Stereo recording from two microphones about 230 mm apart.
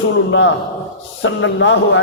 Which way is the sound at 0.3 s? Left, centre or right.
Left.